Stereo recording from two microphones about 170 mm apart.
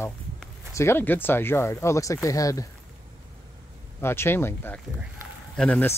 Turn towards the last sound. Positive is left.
turn(degrees=10)  # may be behind; listen again after turning